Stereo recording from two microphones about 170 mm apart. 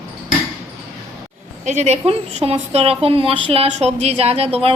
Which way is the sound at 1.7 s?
40° right (ahead or behind).